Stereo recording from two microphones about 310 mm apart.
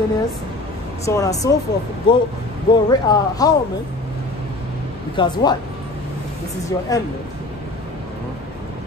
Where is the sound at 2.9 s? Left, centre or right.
Centre.